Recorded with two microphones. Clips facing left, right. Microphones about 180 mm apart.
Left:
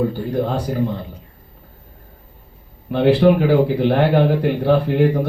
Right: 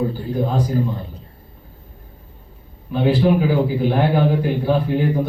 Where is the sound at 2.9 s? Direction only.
65° left (ahead or behind).